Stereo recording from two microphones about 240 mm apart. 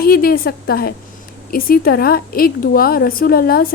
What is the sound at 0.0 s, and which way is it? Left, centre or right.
A woman's voice, left.